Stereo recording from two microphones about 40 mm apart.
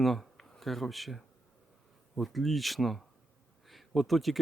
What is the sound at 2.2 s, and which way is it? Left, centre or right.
Speech, centre.